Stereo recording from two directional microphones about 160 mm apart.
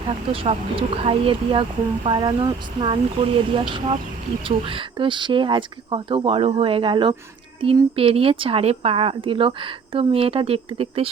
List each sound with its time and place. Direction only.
0.3 s speech: 35° right (ahead or behind)